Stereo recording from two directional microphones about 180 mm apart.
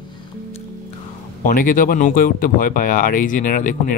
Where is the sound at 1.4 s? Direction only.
50° left (ahead or behind).